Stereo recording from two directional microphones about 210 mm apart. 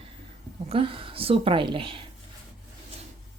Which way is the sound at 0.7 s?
25° right (ahead or behind).